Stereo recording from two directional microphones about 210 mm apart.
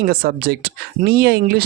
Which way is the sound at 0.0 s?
45° right (ahead or behind).